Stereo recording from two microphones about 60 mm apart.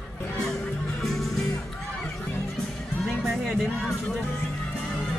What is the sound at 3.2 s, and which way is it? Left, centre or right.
Music, centre.